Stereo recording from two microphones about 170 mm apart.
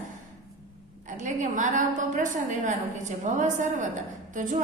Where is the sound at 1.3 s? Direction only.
50° right (ahead or behind).